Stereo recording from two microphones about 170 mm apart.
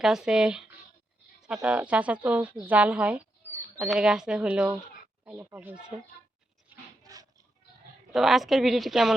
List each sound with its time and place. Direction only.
0.0 s a woman's voice: 5° right (ahead or behind)
7.0 s a sound: 20° right (ahead or behind)
8.1 s a woman's voice: centre (ahead or behind)